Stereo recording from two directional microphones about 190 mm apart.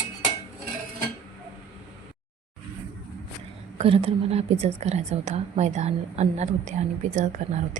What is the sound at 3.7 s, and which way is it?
A woman's voice, 30° right (ahead or behind).